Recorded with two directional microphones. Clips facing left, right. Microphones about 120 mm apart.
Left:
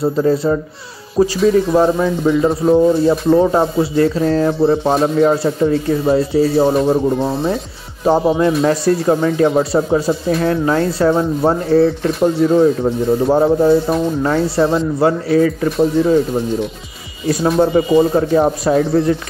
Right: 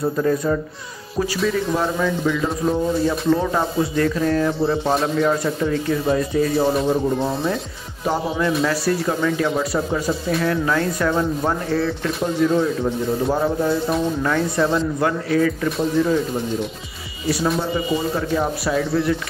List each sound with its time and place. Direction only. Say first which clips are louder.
0.0 s speech: left 5 dB; 30° left (ahead or behind)
8.0 s speech: left 8 dB; 35° left (ahead or behind)
17.6 s speech: left 10 dB; 40° left (ahead or behind)